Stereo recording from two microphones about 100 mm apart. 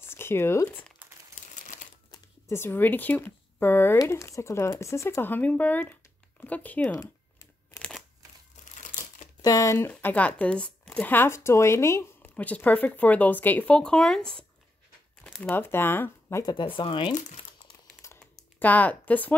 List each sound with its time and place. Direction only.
0.0 s speech: 25° left (ahead or behind)
2.4 s speech: 25° left (ahead or behind)
9.4 s speech: 35° left (ahead or behind)
9.8 s speech: 15° left (ahead or behind)
12.4 s speech: 15° left (ahead or behind)
15.2 s crumpling: 5° left (ahead or behind)
15.5 s speech: 20° left (ahead or behind)
16.4 s speech: 55° left (ahead or behind)
18.2 s a sound: 15° left (ahead or behind)